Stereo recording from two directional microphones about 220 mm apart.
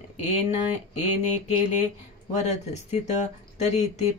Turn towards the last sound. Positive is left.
turn(degrees=30)  # may be behind; listen again after turning